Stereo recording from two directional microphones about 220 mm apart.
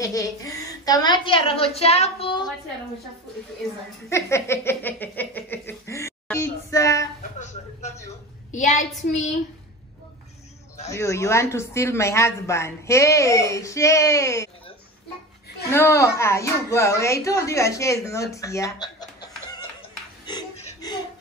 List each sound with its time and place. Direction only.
0.0 s a woman's voice: 15° left (ahead or behind)
4.1 s a sound: 10° left (ahead or behind)
8.5 s a woman's voice: 35° left (ahead or behind)
10.9 s speech: 15° left (ahead or behind)
15.7 s speech: 10° left (ahead or behind)